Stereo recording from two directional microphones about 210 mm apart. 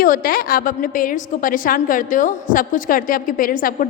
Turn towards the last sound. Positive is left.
turn(degrees=40)  # may be behind; listen again after turning